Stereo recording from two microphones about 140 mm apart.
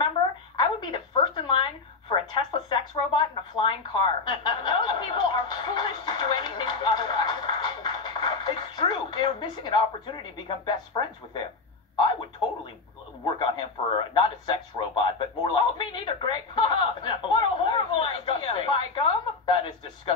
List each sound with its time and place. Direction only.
0.6 s telephone: 35° left (ahead or behind)
13.4 s radio: 35° left (ahead or behind)